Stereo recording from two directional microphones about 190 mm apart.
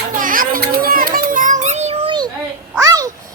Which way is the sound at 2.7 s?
20° right (ahead or behind).